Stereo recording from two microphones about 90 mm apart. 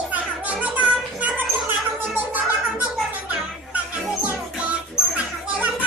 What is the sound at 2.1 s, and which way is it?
Music, 20° right (ahead or behind).